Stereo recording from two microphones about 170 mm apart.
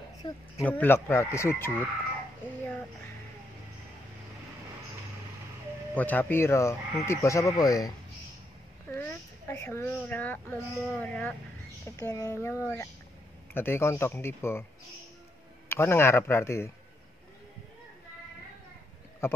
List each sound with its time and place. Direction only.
0.2 s speech: 10° left (ahead or behind)
5.9 s speech: 10° left (ahead or behind)
8.9 s a sound: 15° left (ahead or behind)
10.9 s speech: 10° left (ahead or behind)
12.0 s speech: 20° left (ahead or behind)
15.7 s speech: 15° left (ahead or behind)
19.2 s speech: 15° left (ahead or behind)